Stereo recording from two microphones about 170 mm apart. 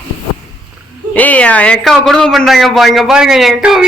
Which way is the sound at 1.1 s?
10° left (ahead or behind).